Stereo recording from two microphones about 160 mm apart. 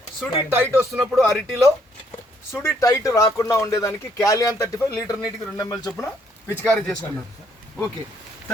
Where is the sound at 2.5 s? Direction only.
20° left (ahead or behind).